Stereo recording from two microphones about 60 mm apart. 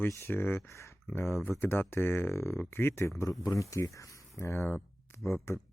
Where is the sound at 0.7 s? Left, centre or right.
Left.